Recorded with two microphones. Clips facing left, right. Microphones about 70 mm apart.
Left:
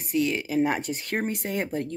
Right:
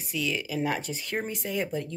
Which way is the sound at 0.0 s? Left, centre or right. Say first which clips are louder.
Left 5 dB; left.